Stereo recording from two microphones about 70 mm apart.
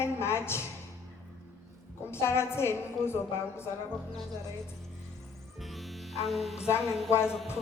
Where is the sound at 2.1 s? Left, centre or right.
Left.